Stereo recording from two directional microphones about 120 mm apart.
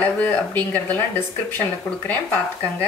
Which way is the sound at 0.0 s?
15° left (ahead or behind).